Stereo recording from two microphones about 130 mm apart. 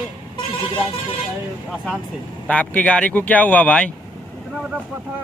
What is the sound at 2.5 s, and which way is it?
Speech, 10° left (ahead or behind).